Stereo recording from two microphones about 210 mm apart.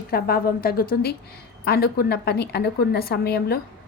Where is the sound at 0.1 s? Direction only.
45° left (ahead or behind).